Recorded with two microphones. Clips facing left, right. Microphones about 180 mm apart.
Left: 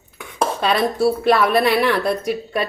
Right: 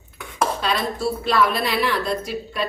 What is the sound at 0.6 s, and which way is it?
A woman's voice, 60° left (ahead or behind).